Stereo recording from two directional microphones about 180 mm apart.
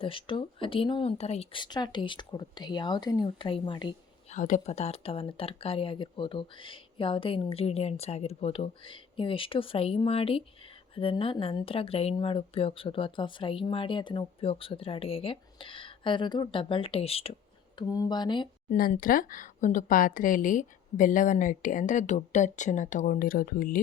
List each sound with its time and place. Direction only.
0.0 s a woman's voice: 30° left (ahead or behind)
4.3 s a woman's voice: 45° left (ahead or behind)
17.7 s a woman's voice: 20° left (ahead or behind)
18.7 s speech: 50° left (ahead or behind)